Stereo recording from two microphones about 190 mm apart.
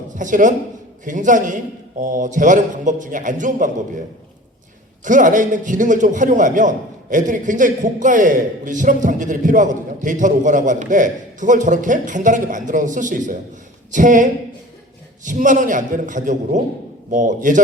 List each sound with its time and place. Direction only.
0.1 s a man's voice: 45° right (ahead or behind)
5.0 s a man's voice: 40° right (ahead or behind)